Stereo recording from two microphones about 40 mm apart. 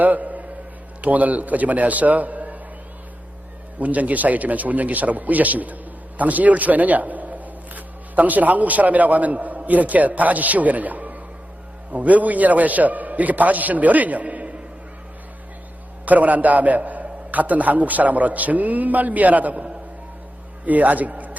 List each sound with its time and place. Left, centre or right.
0.0 s a sound: right
1.0 s a man's voice: right
3.8 s a man's voice: right
16.0 s a man's voice: right
20.7 s a man's voice: right